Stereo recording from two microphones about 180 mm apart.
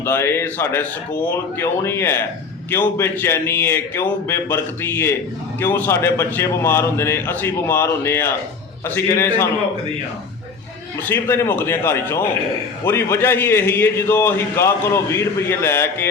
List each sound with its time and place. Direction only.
0.0 s a man's voice: 15° left (ahead or behind)
11.1 s a man's voice: 15° left (ahead or behind)